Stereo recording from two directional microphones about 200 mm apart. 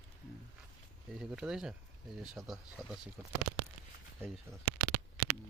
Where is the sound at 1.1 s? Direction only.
5° right (ahead or behind).